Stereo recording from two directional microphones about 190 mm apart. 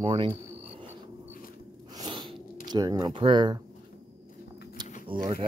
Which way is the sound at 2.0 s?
20° right (ahead or behind).